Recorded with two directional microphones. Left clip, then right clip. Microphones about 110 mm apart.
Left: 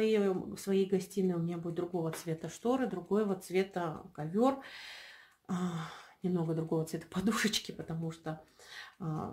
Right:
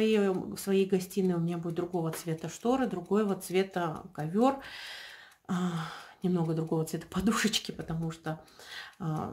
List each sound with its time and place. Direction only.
0.0 s speech: 15° right (ahead or behind)